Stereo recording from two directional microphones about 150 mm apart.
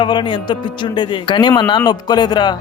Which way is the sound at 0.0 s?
30° left (ahead or behind).